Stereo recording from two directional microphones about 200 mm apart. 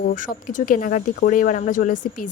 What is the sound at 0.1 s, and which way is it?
A woman's voice, 40° left (ahead or behind).